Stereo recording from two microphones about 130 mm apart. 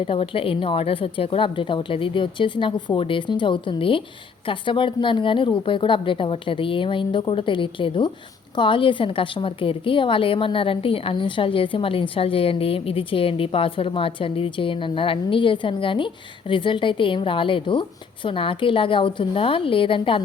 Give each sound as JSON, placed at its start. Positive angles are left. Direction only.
{"t": 0.0, "sound": "a woman's voice", "side_deg": 45}